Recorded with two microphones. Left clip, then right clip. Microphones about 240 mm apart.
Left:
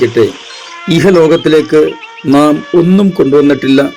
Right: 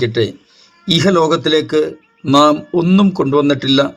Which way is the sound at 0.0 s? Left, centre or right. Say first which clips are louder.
Left 7 dB; centre.